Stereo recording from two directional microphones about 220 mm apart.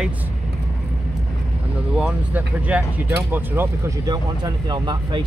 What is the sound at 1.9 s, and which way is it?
Speech, 5° right (ahead or behind).